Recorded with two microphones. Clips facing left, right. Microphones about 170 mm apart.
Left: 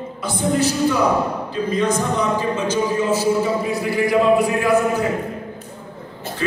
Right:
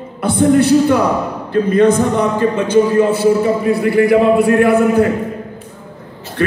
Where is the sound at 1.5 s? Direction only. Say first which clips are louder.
Right 10 dB; 60° right (ahead or behind).